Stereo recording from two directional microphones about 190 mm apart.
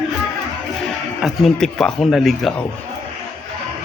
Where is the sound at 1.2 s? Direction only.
Centre (ahead or behind).